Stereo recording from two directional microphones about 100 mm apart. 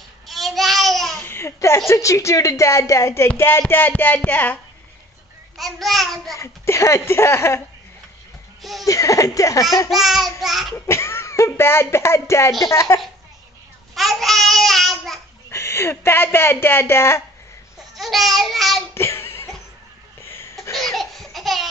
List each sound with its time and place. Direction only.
0.3 s babbling: centre (ahead or behind)
1.1 s laughter: 20° left (ahead or behind)
1.9 s a woman's voice: 30° left (ahead or behind)
5.6 s child singing: centre (ahead or behind)
6.3 s speech: 30° left (ahead or behind)
8.8 s a woman's voice: 35° left (ahead or behind)
9.8 s child singing: centre (ahead or behind)
10.9 s a woman's voice: 25° left (ahead or behind)
13.9 s babbling: centre (ahead or behind)
15.5 s speech: 25° left (ahead or behind)
17.9 s child singing: centre (ahead or behind)
18.9 s a sound: 25° left (ahead or behind)
20.7 s laughter: centre (ahead or behind)